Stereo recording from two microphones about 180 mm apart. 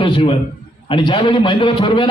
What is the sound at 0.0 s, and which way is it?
A man's voice, 30° left (ahead or behind).